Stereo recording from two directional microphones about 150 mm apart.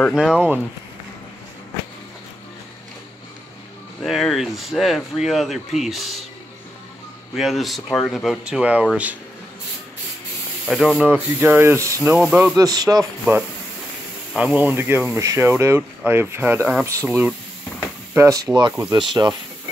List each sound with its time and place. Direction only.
0.1 s speech: 5° right (ahead or behind)
4.0 s speech: centre (ahead or behind)
7.3 s speech: centre (ahead or behind)
10.7 s speech: centre (ahead or behind); by 13.0 s 25° right (ahead or behind)
14.3 s speech: 10° right (ahead or behind); by 19.3 s 30° right (ahead or behind)